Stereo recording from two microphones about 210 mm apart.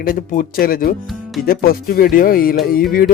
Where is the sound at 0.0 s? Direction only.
40° left (ahead or behind).